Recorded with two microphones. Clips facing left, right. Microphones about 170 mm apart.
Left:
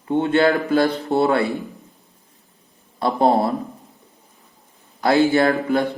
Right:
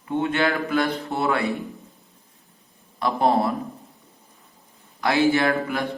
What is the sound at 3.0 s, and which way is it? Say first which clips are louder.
Speech: left 3 dB; 30° left (ahead or behind).